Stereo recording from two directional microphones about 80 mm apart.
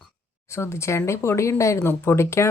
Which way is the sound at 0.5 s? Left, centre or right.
Left.